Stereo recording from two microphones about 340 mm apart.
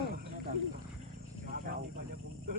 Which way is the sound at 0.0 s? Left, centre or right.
Right.